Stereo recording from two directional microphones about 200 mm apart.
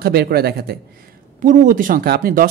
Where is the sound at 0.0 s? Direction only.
50° right (ahead or behind).